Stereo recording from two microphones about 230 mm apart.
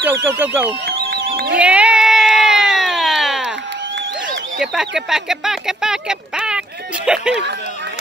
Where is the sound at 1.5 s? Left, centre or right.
Centre.